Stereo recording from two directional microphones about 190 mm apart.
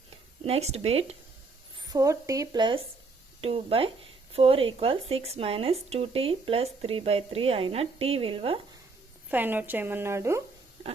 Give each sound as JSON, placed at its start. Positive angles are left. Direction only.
{"t": 0.4, "sound": "speech", "side_deg": -35}
{"t": 1.9, "sound": "speech", "side_deg": -15}
{"t": 9.3, "sound": "a woman's voice", "side_deg": -10}